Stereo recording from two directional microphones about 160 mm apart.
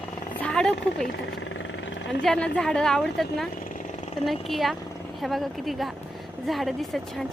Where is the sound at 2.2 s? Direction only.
5° left (ahead or behind).